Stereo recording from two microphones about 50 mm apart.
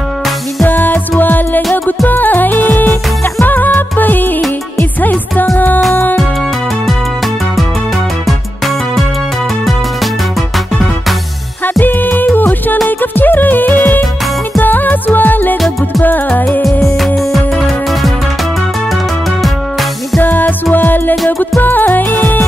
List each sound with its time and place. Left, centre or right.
0.7 s music: left
11.8 s music: left
17.0 s music: centre
20.2 s music: left